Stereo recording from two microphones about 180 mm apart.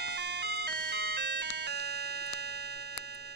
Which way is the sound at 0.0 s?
70° right (ahead or behind).